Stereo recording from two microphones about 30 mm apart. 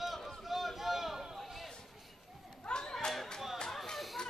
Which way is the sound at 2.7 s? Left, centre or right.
Left.